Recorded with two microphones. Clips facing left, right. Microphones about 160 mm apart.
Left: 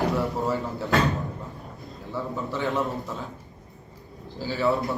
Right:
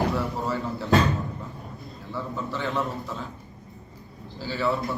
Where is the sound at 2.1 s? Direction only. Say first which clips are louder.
Left 1 dB; 20° left (ahead or behind).